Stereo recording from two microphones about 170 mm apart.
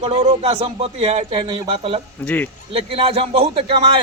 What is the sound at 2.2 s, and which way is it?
Speech, 10° left (ahead or behind).